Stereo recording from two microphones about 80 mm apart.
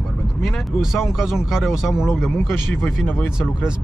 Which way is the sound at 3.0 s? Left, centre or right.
Left.